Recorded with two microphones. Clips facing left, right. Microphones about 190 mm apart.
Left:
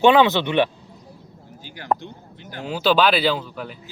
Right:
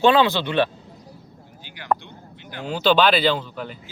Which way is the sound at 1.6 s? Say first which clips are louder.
Left 4 dB; 40° left (ahead or behind).